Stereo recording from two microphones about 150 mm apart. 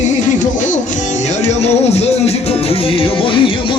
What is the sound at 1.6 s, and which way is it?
Music, 45° left (ahead or behind).